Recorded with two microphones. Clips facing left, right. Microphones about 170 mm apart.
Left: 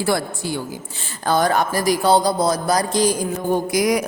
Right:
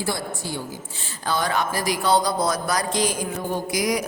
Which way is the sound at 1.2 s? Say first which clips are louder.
Left 6 dB; 45° left (ahead or behind).